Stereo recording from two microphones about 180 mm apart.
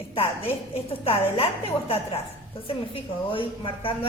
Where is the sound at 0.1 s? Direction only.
30° left (ahead or behind).